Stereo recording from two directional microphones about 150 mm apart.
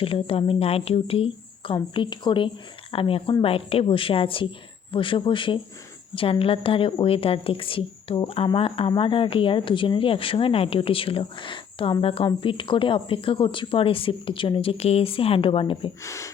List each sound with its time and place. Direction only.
0.0 s speech: 40° left (ahead or behind)
16.0 s speech: 20° left (ahead or behind)